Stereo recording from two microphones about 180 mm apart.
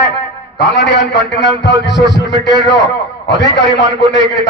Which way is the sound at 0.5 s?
75° left (ahead or behind).